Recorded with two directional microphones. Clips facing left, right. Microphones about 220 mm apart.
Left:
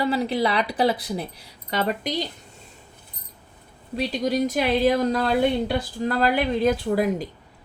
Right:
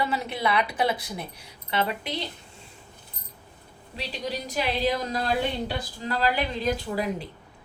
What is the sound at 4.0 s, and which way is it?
A woman's voice, 45° left (ahead or behind).